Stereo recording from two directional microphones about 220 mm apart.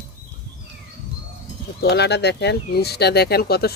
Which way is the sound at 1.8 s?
50° left (ahead or behind).